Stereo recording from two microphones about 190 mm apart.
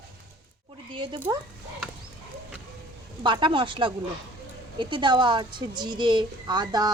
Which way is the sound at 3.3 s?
25° right (ahead or behind).